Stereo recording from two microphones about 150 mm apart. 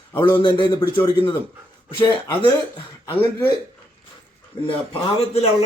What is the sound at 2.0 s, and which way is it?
Speech, 30° left (ahead or behind).